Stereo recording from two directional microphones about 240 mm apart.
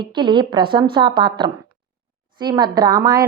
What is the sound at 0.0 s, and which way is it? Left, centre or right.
A woman's voice, centre.